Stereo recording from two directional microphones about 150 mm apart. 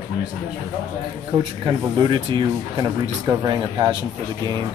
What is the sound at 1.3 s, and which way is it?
Speech, 40° right (ahead or behind).